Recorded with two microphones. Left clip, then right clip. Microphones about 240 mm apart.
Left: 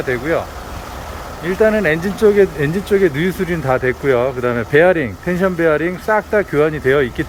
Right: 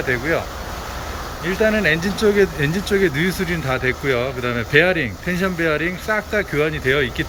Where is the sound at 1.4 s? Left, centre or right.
Centre.